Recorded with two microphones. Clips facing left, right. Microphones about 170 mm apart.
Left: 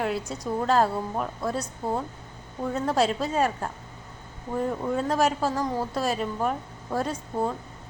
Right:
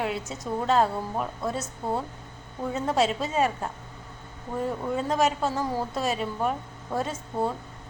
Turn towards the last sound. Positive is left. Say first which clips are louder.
# left 1 dB
turn(degrees=-5)  # may be behind; listen again after turning